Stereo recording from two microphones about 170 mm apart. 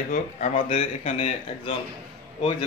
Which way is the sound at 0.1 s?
50° left (ahead or behind).